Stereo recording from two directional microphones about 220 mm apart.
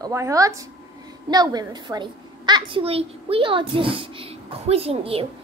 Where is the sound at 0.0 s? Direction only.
15° right (ahead or behind).